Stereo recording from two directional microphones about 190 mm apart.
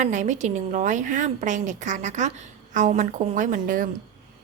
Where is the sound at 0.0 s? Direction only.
40° right (ahead or behind).